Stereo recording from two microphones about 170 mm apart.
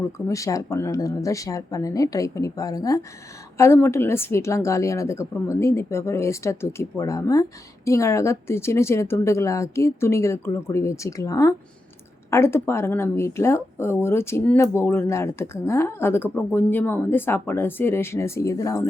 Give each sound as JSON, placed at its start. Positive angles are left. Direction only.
{"t": 0.3, "sound": "speech", "side_deg": 20}